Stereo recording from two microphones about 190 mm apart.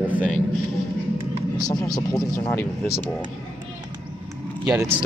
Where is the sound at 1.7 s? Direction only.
20° left (ahead or behind).